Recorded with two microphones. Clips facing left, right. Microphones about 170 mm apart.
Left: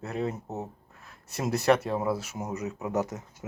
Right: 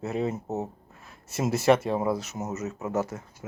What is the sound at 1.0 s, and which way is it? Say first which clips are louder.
Speech: right 3 dB; centre (ahead or behind).